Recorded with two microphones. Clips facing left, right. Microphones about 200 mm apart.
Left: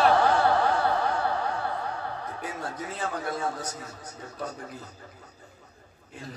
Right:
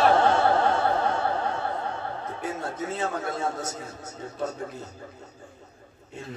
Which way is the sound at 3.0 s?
25° right (ahead or behind).